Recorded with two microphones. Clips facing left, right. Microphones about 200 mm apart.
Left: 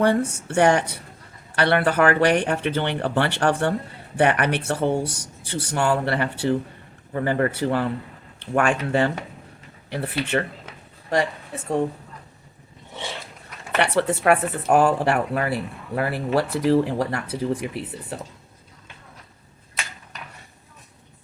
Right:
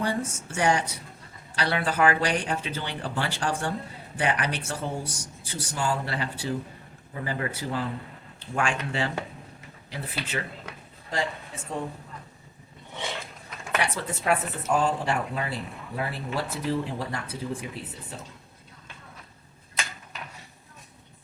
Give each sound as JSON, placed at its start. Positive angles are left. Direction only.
{"t": 0.0, "sound": "speech", "side_deg": 65}
{"t": 9.9, "sound": "speech", "side_deg": 65}
{"t": 13.7, "sound": "speech", "side_deg": 70}